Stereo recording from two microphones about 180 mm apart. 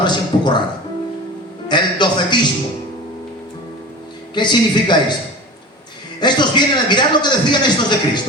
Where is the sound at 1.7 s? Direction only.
25° left (ahead or behind).